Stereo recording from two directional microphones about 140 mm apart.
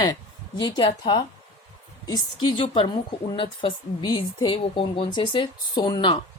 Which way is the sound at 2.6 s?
35° left (ahead or behind).